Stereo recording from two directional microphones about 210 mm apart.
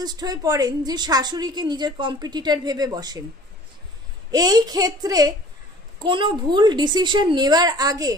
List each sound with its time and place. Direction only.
0.0 s a woman's voice: 20° right (ahead or behind)
4.3 s a woman's voice: 20° right (ahead or behind)